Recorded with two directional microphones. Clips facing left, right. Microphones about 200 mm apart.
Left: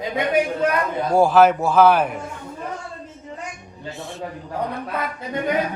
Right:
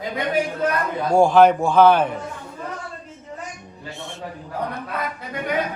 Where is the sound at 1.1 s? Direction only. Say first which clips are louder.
Right 1 dB; 5° left (ahead or behind).